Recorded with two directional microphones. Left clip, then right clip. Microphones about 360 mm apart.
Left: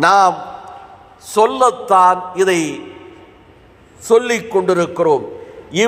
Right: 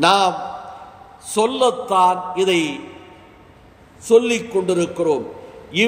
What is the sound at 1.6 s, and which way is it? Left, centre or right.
Speech, left.